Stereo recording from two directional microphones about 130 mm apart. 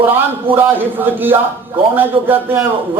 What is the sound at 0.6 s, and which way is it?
Speech, 15° right (ahead or behind).